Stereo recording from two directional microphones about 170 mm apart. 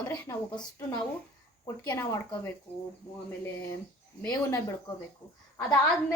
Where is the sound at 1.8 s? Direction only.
20° left (ahead or behind).